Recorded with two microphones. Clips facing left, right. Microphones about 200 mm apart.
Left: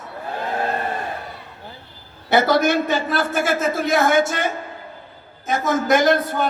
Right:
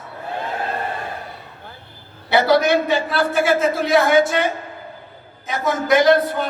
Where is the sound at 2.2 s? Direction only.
45° left (ahead or behind).